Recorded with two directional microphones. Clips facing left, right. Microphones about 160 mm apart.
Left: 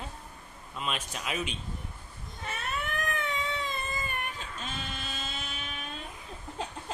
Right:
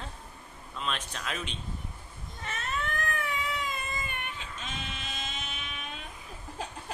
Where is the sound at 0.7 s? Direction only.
10° left (ahead or behind).